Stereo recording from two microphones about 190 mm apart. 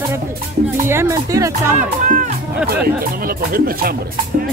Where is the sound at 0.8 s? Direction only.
15° right (ahead or behind).